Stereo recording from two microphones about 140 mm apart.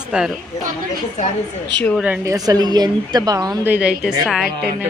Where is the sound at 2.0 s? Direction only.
10° right (ahead or behind).